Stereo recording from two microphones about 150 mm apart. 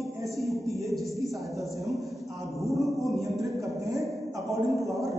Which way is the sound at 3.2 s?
20° right (ahead or behind).